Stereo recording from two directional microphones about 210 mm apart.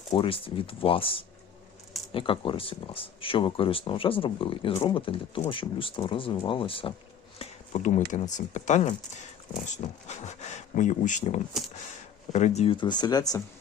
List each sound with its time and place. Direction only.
0.1 s speech: 25° left (ahead or behind)